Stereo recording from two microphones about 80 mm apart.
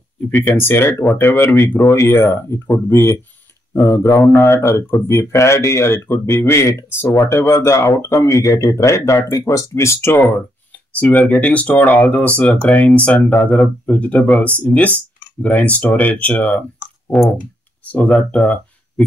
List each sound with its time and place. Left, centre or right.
0.3 s speech: left
10.2 s speech: centre
17.9 s speech: centre